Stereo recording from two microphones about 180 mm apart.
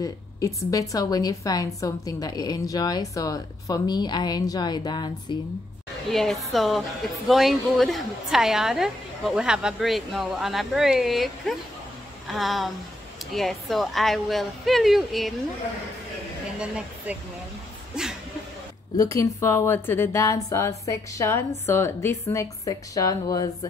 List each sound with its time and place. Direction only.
0.0 s a woman's voice: 15° left (ahead or behind)
6.1 s a woman's voice: centre (ahead or behind)
16.5 s a woman's voice: 5° right (ahead or behind)
18.9 s a woman's voice: 15° left (ahead or behind)